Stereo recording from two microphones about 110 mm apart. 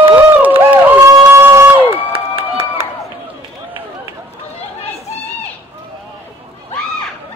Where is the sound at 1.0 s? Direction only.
30° right (ahead or behind).